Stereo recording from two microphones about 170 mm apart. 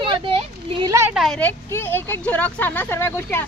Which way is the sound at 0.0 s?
30° right (ahead or behind).